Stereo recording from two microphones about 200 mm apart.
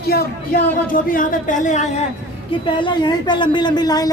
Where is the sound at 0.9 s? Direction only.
40° left (ahead or behind).